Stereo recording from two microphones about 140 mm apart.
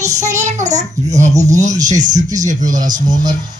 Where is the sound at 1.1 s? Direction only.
55° right (ahead or behind).